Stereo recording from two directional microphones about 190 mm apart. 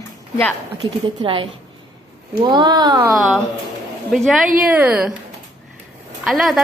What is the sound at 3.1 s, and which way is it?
A woman's voice, centre (ahead or behind).